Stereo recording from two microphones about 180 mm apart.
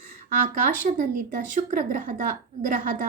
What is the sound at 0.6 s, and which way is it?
Speech, 45° right (ahead or behind).